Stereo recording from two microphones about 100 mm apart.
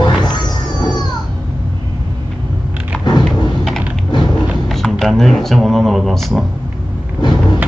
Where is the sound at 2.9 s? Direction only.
15° left (ahead or behind).